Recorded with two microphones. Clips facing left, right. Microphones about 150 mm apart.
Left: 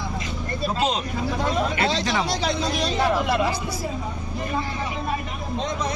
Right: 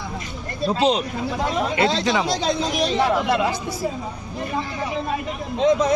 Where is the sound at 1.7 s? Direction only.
25° right (ahead or behind).